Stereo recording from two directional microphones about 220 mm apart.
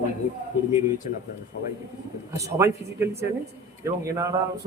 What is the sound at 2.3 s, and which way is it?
Speech, 15° right (ahead or behind).